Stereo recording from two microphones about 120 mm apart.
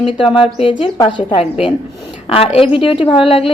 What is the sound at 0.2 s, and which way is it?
A woman's voice, 45° left (ahead or behind).